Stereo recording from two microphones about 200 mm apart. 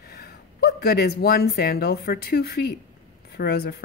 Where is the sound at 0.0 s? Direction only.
50° left (ahead or behind).